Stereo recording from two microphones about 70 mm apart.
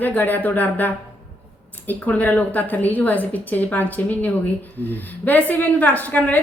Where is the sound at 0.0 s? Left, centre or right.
Left.